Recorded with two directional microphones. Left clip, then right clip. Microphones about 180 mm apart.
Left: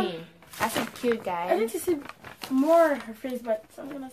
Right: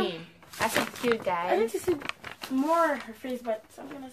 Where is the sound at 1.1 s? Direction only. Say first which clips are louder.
Right 1 dB; centre (ahead or behind).